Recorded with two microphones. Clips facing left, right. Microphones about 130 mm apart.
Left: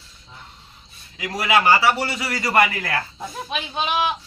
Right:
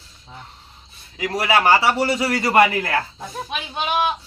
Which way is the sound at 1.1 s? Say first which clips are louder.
Right 1 dB; 30° right (ahead or behind).